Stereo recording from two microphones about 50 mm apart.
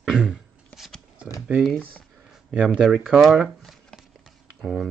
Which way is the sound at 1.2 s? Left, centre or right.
Right.